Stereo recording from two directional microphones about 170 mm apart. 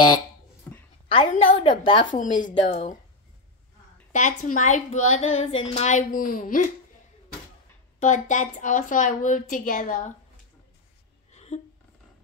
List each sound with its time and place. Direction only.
1.0 s a woman's voice: 30° left (ahead or behind)
4.1 s a woman's voice: 45° left (ahead or behind)
8.0 s a woman's voice: 45° left (ahead or behind)
11.3 s a sound: 40° left (ahead or behind)